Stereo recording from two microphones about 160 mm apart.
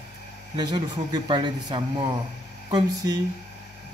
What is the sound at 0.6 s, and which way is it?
Speech, 25° right (ahead or behind).